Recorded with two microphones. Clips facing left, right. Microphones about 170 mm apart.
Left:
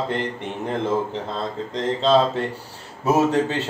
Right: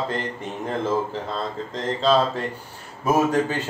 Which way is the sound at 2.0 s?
25° left (ahead or behind).